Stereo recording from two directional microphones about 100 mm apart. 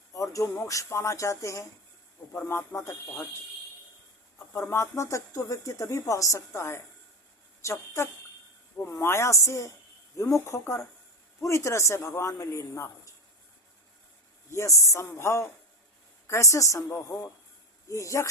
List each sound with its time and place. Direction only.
0.1 s a sound: 30° left (ahead or behind)
0.7 s a man's voice: 30° left (ahead or behind)
4.7 s a man's voice: 30° left (ahead or behind)
14.5 s a man's voice: 30° left (ahead or behind)